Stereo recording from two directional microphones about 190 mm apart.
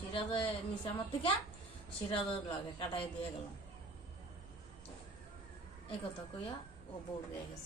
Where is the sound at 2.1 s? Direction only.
30° left (ahead or behind).